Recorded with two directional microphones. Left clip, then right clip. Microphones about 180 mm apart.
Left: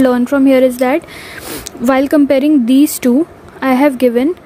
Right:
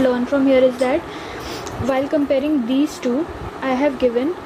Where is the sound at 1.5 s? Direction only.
50° left (ahead or behind).